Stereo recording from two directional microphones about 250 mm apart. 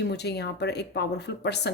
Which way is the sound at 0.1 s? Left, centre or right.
Left.